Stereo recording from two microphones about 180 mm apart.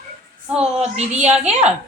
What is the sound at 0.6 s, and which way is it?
Speech, 35° right (ahead or behind).